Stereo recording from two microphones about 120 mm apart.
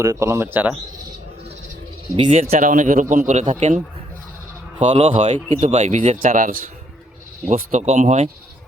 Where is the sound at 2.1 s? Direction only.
55° right (ahead or behind); by 3.4 s 90° right.